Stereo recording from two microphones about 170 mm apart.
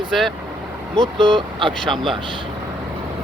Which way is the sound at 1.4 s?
30° right (ahead or behind).